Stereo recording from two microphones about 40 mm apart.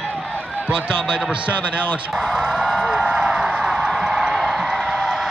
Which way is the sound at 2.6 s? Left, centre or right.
Centre.